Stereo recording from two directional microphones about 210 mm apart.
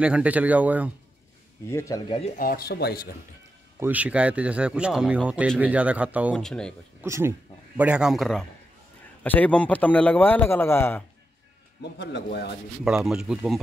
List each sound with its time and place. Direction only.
0.0 s speech: 5° right (ahead or behind)
1.7 s a man's voice: 15° left (ahead or behind)
2.3 s speech: 45° left (ahead or behind)
3.8 s speech: 5° right (ahead or behind)
7.0 s a man's voice: 10° right (ahead or behind); by 11.1 s 10° left (ahead or behind)
11.8 s speech: 55° left (ahead or behind)
12.8 s speech: 5° right (ahead or behind)